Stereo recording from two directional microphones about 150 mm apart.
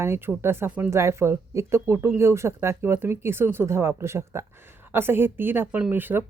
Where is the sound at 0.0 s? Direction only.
15° right (ahead or behind).